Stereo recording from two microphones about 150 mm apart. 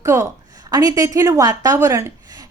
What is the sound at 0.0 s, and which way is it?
A woman's voice, 20° right (ahead or behind).